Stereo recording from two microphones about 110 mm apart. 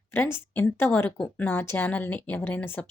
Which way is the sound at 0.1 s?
20° left (ahead or behind).